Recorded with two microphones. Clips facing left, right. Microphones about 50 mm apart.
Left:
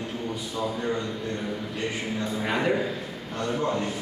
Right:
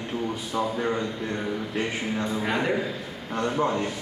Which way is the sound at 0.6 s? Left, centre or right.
Right.